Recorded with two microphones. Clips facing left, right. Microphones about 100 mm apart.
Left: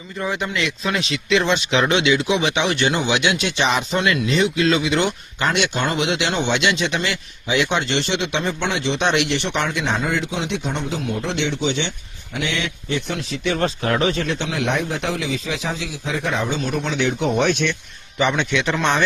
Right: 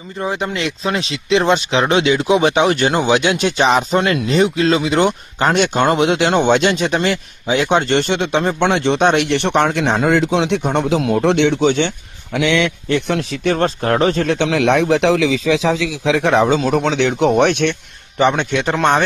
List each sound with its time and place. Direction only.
0.2 s speech: 30° right (ahead or behind); by 11.9 s 50° right (ahead or behind)
12.3 s a man's voice: 80° right
12.9 s speech: 60° right (ahead or behind)
13.4 s speech: 45° right (ahead or behind)
14.3 s speech: 75° right (ahead or behind); by 19.0 s 55° right (ahead or behind)